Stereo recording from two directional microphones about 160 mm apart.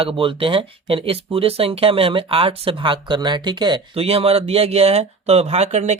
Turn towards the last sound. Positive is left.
turn(degrees=-45)  # may be behind; listen again after turning